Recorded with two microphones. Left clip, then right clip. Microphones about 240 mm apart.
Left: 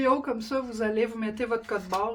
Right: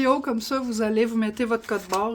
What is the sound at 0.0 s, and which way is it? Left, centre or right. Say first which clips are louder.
Speech: right 3 dB; right.